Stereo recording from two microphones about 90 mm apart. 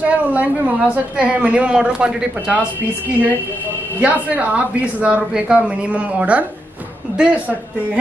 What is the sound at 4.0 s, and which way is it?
Speech, 15° right (ahead or behind).